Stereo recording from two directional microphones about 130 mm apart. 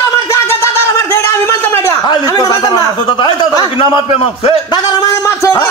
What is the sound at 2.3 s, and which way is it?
A man's voice, 30° left (ahead or behind).